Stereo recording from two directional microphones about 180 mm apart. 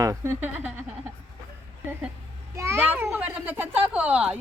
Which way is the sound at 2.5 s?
15° right (ahead or behind).